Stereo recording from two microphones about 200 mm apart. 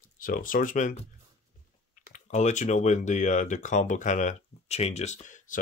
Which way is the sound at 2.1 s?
35° left (ahead or behind).